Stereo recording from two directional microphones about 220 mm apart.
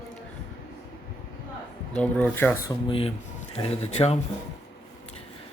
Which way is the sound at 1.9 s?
5° left (ahead or behind).